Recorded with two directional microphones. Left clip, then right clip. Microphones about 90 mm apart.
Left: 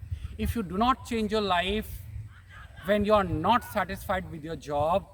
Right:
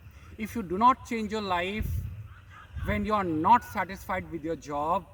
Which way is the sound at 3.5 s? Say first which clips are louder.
Right 5 dB; 40° left (ahead or behind).